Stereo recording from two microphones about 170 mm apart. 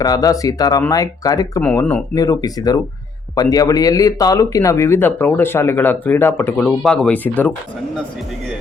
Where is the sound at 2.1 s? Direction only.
20° left (ahead or behind).